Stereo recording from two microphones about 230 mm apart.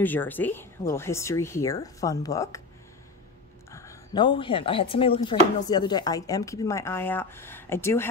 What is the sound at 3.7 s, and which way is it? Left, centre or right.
Speech, centre.